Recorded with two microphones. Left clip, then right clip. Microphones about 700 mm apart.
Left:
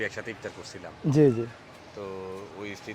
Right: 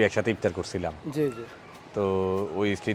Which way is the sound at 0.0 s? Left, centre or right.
Right.